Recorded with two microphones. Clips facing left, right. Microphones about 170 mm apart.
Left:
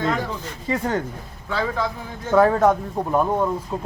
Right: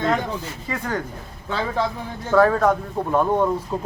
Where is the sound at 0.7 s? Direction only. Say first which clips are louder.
Left 4 dB; 25° left (ahead or behind).